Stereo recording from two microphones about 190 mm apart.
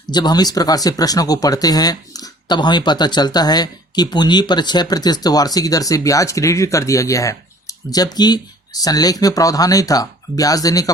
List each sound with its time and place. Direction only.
0.1 s speech: 20° left (ahead or behind)